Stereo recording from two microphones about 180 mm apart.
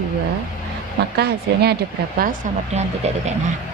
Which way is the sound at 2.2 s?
45° right (ahead or behind).